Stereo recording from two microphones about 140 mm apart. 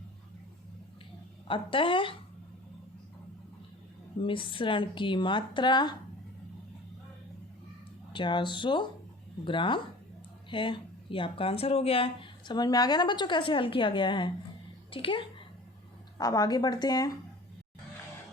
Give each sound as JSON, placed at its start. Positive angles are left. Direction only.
{"t": 1.5, "sound": "speech", "side_deg": 40}
{"t": 4.2, "sound": "speech", "side_deg": 35}
{"t": 8.1, "sound": "speech", "side_deg": 35}